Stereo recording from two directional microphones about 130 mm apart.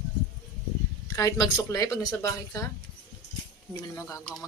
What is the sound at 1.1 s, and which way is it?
Speech, 25° left (ahead or behind).